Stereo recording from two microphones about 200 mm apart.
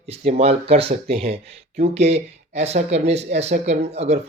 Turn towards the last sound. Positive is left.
turn(degrees=-30)  # may be behind; listen again after turning